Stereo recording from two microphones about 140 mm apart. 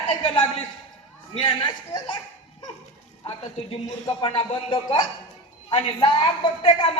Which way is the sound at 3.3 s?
40° left (ahead or behind).